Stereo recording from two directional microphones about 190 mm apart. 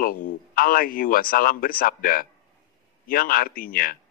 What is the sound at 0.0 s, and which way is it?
Speech, 45° left (ahead or behind).